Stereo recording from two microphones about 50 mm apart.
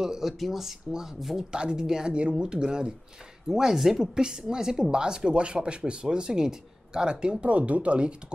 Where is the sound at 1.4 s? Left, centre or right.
Centre.